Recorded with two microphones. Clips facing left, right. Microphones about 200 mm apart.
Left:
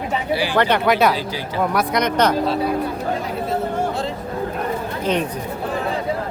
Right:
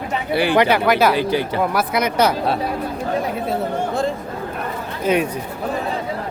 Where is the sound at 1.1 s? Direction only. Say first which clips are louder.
Right 7 dB; 60° right (ahead or behind).